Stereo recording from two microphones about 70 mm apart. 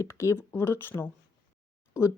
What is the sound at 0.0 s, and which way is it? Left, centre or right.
Speech, left.